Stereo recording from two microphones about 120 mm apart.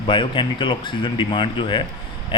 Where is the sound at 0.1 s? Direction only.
40° left (ahead or behind).